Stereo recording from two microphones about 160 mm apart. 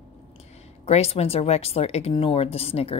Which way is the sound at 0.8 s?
40° left (ahead or behind).